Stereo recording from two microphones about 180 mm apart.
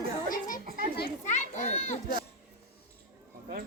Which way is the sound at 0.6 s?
55° right (ahead or behind).